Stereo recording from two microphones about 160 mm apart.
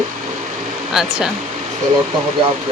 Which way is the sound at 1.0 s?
5° right (ahead or behind).